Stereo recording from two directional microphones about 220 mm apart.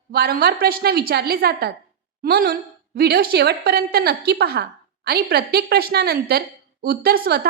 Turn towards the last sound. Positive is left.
turn(degrees=-45)  # may be behind; listen again after turning